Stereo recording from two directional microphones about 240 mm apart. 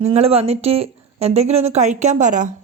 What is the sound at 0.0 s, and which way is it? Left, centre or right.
A woman's voice, right.